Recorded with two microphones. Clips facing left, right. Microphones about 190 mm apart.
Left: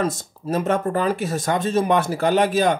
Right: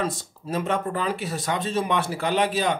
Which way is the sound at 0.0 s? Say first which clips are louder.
Left 4 dB; 45° left (ahead or behind).